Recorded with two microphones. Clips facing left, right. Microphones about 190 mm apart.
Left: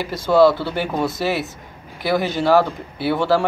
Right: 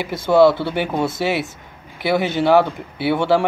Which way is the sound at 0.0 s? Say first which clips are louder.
Right 1 dB; 20° right (ahead or behind).